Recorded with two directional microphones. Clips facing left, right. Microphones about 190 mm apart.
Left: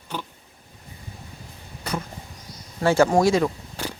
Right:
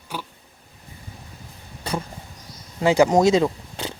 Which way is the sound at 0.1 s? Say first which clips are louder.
Left 1 dB; 10° right (ahead or behind).